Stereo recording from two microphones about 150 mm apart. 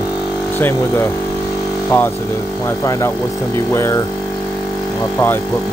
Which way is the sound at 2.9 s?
20° left (ahead or behind).